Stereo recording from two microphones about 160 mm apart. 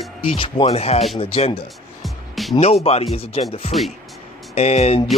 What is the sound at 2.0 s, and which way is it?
Music, centre (ahead or behind).